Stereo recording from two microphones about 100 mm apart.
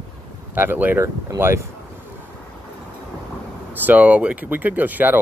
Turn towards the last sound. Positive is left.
turn(degrees=-15)  # may be behind; listen again after turning